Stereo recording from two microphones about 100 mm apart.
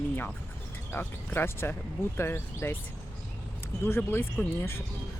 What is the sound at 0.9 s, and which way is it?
Speech, 20° left (ahead or behind).